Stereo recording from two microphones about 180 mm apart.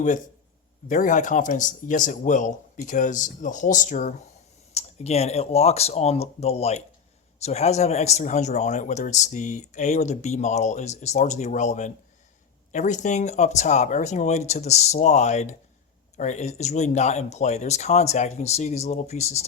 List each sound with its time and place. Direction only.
0.9 s a man's voice: 45° left (ahead or behind)